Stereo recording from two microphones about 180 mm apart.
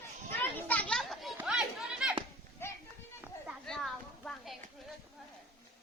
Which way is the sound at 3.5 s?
Centre (ahead or behind).